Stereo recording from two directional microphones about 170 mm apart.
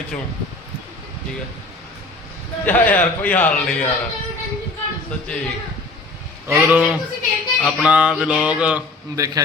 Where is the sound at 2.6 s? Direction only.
10° left (ahead or behind).